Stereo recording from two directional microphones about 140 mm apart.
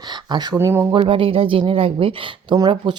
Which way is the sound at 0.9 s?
40° right (ahead or behind).